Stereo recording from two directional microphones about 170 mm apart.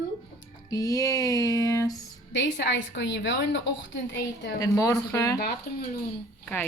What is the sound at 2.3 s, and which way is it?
A woman's voice, 90° left.